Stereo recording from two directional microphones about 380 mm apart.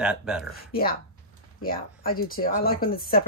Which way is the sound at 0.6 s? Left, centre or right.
Left.